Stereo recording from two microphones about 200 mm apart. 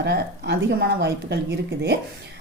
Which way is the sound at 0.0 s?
55° right (ahead or behind).